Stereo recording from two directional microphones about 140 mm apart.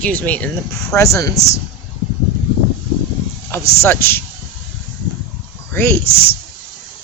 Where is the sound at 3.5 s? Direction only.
15° left (ahead or behind).